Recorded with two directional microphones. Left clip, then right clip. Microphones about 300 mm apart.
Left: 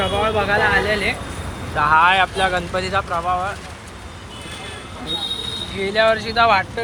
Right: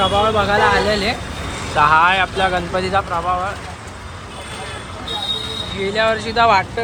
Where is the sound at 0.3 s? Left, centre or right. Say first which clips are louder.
Right 2 dB; centre.